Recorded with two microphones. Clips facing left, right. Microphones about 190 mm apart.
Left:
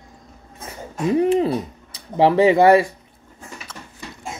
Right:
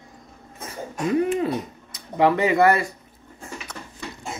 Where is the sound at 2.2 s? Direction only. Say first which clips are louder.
Left 4 dB; 30° left (ahead or behind).